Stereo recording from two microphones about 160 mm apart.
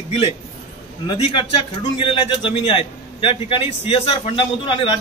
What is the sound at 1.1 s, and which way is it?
A man's voice, 35° left (ahead or behind).